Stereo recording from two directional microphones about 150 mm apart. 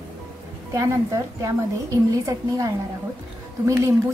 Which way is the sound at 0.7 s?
20° right (ahead or behind).